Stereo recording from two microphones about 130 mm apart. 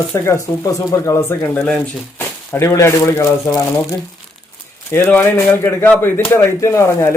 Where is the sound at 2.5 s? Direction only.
20° left (ahead or behind).